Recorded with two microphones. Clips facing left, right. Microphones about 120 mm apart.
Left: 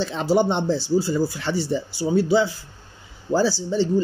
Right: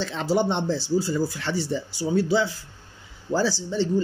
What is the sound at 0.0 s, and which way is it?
Speech, 15° left (ahead or behind).